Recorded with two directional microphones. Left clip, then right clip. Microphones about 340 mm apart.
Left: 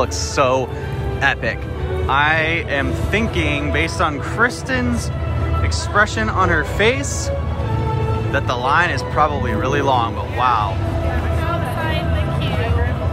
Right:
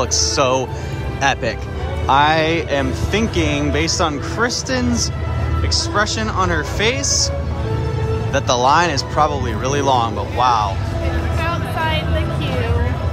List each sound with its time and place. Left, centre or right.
0.0 s speech: centre
5.9 s speech: centre
8.3 s speech: centre